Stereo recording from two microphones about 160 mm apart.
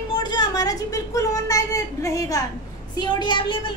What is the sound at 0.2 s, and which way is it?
A woman's voice, 25° left (ahead or behind).